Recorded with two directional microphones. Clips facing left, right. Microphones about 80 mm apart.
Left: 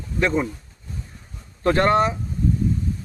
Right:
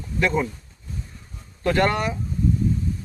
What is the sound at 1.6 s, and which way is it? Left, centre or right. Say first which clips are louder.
Speech: left 3 dB; left.